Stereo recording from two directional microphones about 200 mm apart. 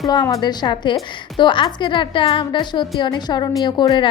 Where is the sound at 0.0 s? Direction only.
20° left (ahead or behind).